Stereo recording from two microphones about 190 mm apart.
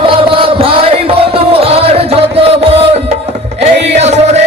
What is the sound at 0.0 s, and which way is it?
Chant, 30° right (ahead or behind).